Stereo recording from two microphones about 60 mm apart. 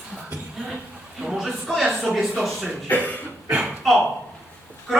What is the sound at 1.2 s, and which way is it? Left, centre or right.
A man's voice, centre.